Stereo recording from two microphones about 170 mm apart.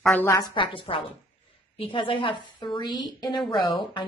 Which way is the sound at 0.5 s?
30° left (ahead or behind).